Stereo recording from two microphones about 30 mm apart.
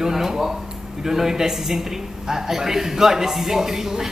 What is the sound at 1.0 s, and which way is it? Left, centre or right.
A man's voice, centre.